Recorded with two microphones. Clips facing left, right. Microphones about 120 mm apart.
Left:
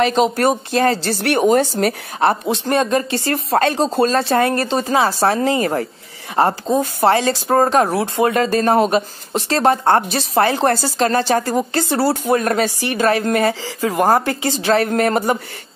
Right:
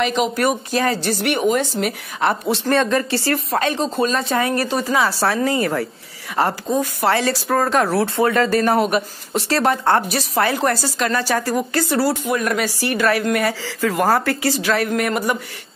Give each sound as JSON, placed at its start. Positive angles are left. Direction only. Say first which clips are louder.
{"t": 0.0, "sound": "speech", "louder": "left 3 dB", "side_deg": 35}
{"t": 2.4, "sound": "speech", "louder": "even", "side_deg": 20}
{"t": 3.5, "sound": "speech", "louder": "left 6 dB", "side_deg": 35}
{"t": 4.6, "sound": "speech", "louder": "left 2 dB", "side_deg": 25}
{"t": 12.6, "sound": "speech", "louder": "left 2 dB", "side_deg": 25}